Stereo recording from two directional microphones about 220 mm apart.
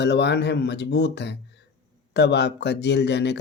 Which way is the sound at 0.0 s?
50° left (ahead or behind).